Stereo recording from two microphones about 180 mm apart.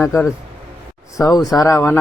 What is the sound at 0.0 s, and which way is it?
Speech, 10° left (ahead or behind).